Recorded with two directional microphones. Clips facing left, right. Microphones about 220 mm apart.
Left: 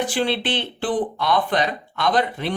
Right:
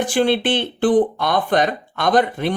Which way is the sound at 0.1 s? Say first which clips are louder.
Right 5 dB; 50° right (ahead or behind).